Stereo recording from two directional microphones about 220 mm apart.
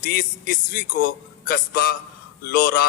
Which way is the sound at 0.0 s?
40° left (ahead or behind).